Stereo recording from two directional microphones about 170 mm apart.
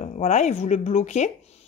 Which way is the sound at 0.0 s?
45° left (ahead or behind).